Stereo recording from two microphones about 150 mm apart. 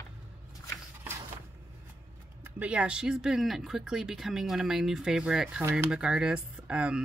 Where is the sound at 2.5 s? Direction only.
10° right (ahead or behind).